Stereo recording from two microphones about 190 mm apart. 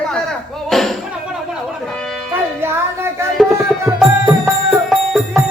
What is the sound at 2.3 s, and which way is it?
Music, 10° right (ahead or behind).